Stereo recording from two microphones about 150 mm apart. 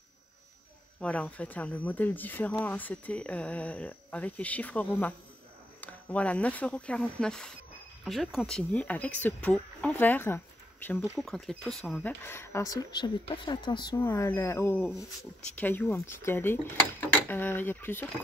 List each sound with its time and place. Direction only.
1.0 s speech: 5° left (ahead or behind)
11.1 s speech: centre (ahead or behind)